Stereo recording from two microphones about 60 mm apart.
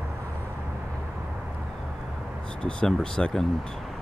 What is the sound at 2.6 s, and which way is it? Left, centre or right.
Speech, centre.